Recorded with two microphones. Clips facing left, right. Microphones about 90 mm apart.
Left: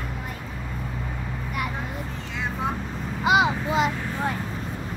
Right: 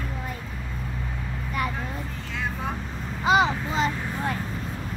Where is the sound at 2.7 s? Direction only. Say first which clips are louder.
Left 2 dB; 5° left (ahead or behind).